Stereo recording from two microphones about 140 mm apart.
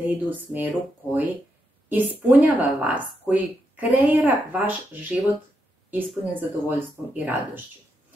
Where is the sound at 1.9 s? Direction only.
10° right (ahead or behind).